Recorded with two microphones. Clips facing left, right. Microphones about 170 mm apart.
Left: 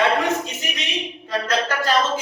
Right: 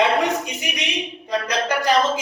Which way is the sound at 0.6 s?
15° right (ahead or behind).